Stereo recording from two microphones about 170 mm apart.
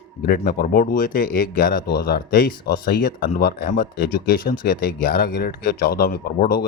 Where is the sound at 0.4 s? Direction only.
60° left (ahead or behind).